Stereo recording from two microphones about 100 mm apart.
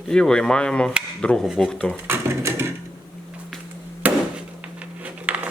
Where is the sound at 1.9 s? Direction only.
25° right (ahead or behind).